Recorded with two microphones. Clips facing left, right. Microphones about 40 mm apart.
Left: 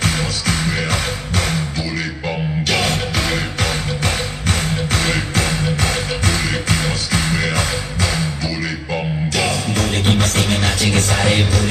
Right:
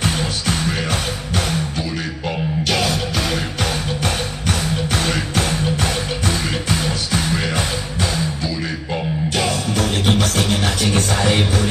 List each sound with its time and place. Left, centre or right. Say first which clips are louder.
0.0 s music: left 1 dB; left
2.7 s music: left 2 dB; left
9.7 s music: even; left